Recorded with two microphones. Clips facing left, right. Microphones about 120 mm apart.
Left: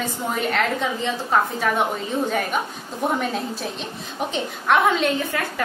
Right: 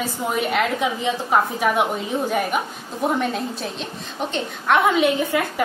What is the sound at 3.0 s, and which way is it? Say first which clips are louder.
A woman's voice: right 1 dB; centre (ahead or behind).